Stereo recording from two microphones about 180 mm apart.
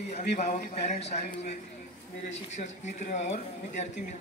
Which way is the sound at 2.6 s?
40° left (ahead or behind).